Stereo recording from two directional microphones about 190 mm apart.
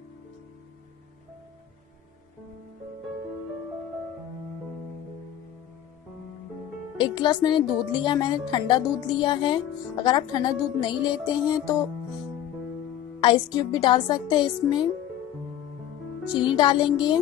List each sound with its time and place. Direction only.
7.0 s a woman's voice: 25° left (ahead or behind)
13.2 s a woman's voice: 25° left (ahead or behind)
16.4 s a woman's voice: 25° left (ahead or behind)